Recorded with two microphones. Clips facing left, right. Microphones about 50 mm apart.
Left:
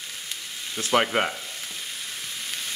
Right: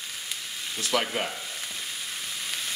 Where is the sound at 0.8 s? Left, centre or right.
Left.